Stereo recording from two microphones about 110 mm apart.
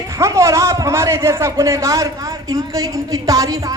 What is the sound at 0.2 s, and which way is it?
A man's voice, 25° right (ahead or behind).